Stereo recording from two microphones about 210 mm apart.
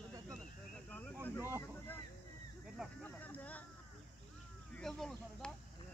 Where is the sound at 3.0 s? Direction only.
10° left (ahead or behind).